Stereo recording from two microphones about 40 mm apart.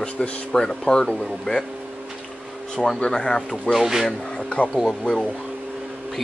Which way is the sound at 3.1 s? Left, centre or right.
Centre.